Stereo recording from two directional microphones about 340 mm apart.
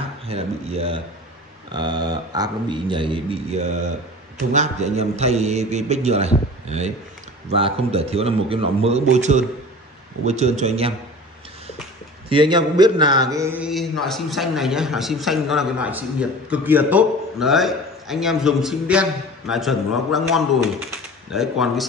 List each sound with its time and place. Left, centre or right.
0.3 s a man's voice: centre
12.3 s a man's voice: centre